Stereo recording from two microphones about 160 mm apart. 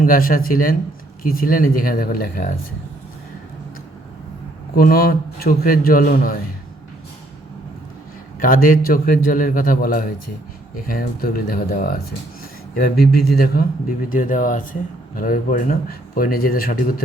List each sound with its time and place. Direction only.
0.0 s speech: 60° left (ahead or behind)
4.7 s speech: 65° left (ahead or behind)
8.4 s speech: 60° left (ahead or behind)
14.1 s speech: 55° left (ahead or behind)